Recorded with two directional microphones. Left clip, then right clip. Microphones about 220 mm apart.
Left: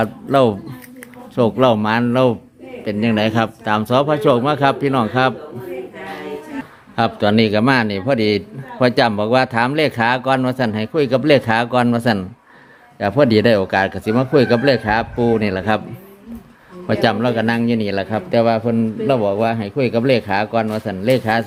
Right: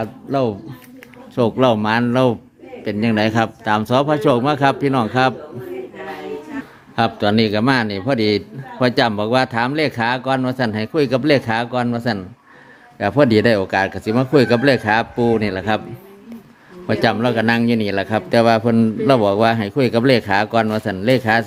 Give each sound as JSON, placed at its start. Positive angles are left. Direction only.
{"t": 0.0, "sound": "speech", "side_deg": 15}
{"t": 1.4, "sound": "a man's voice", "side_deg": 0}
{"t": 6.9, "sound": "a man's voice", "side_deg": 0}
{"t": 13.0, "sound": "a man's voice", "side_deg": 0}
{"t": 16.8, "sound": "a man's voice", "side_deg": 0}